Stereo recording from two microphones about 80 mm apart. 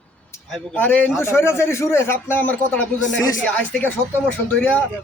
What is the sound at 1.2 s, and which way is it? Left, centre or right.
A man's voice, left.